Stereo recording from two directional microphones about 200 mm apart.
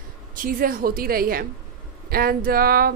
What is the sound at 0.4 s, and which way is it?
Speech, 45° right (ahead or behind).